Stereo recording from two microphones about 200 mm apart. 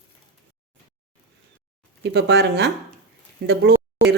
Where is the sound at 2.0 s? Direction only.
60° right (ahead or behind).